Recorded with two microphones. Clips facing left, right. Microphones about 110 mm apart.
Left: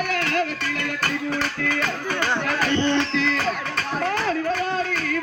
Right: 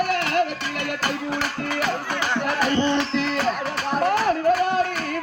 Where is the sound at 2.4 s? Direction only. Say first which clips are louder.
Right 1 dB; 10° right (ahead or behind).